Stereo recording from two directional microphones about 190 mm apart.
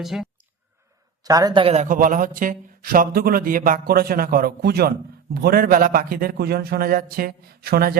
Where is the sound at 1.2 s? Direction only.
20° right (ahead or behind).